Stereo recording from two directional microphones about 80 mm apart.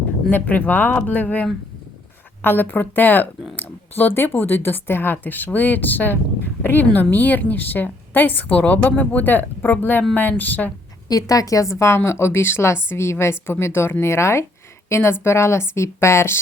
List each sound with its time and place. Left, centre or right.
0.3 s a woman's voice: centre
11.1 s a woman's voice: left